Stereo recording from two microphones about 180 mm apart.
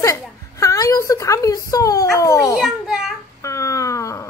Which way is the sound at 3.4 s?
15° left (ahead or behind).